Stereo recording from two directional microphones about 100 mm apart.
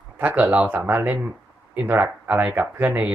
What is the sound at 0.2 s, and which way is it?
Speech, 20° right (ahead or behind).